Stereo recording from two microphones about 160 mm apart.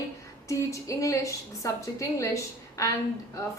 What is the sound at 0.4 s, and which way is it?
A woman's voice, 20° left (ahead or behind).